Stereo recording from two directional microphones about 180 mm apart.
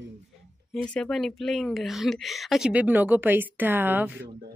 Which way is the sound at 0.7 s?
5° left (ahead or behind).